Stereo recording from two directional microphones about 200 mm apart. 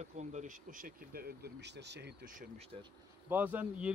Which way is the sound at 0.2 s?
35° right (ahead or behind).